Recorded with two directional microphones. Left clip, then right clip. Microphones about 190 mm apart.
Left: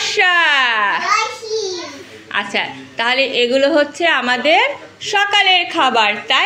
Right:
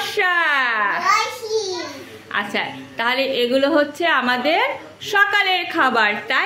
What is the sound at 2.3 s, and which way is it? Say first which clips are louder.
A woman's voice: left 3 dB; centre (ahead or behind).